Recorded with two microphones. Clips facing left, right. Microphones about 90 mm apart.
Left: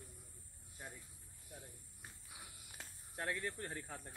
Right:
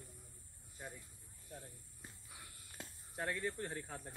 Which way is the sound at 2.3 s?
20° left (ahead or behind).